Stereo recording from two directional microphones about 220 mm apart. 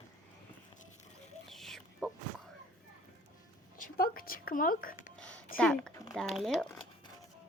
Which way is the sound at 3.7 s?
40° left (ahead or behind).